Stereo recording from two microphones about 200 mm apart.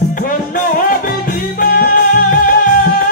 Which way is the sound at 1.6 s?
45° left (ahead or behind).